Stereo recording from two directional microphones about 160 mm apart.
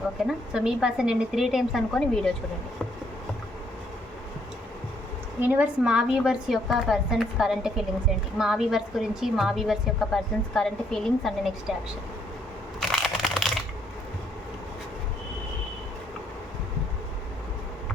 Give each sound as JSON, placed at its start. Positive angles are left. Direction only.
{"t": 0.3, "sound": "a woman's voice", "side_deg": -5}
{"t": 5.4, "sound": "a woman's voice", "side_deg": -10}
{"t": 12.8, "sound": "a sound", "side_deg": 0}